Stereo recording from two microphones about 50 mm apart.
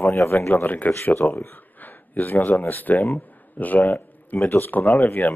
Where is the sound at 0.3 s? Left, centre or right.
Left.